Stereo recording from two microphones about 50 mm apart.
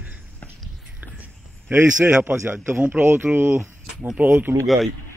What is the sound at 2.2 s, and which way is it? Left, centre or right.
A man's voice, right.